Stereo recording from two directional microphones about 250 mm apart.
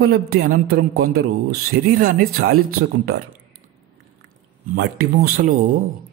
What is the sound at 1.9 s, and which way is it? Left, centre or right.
Speech, right.